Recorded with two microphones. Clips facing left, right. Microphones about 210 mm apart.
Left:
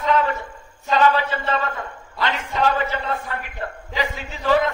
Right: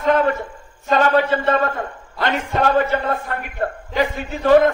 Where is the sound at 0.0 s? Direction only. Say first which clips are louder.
Right 4 dB; 50° right (ahead or behind).